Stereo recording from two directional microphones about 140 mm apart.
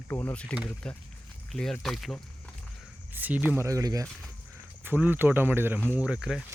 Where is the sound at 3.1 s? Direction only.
10° right (ahead or behind).